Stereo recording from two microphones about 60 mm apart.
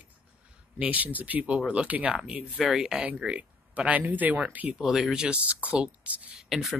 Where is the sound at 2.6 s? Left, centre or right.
Centre.